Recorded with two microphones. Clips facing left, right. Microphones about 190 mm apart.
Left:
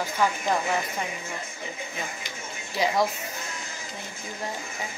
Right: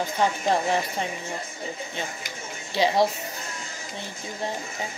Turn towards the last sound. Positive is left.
turn(degrees=-30)  # may be behind; listen again after turning